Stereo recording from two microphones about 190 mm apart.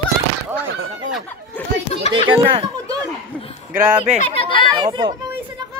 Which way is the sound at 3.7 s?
10° right (ahead or behind).